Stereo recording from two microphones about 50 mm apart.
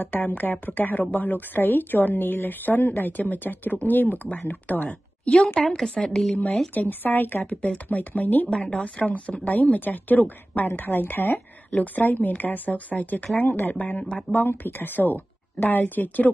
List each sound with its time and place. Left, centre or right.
0.0 s a woman's voice: left
5.6 s a woman's voice: centre
6.7 s a woman's voice: left
7.4 s a woman's voice: left
8.5 s a woman's voice: centre; by 11.3 s left
11.3 s a woman's voice: left
13.7 s speech: left
14.3 s a woman's voice: left